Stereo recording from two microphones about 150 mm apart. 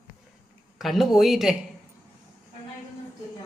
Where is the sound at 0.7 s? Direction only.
Centre (ahead or behind).